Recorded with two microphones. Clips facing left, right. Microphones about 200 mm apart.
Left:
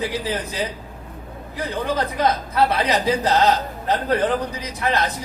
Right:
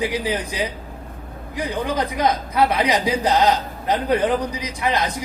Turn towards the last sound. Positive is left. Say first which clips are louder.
# even
turn(degrees=-15)  # may be behind; listen again after turning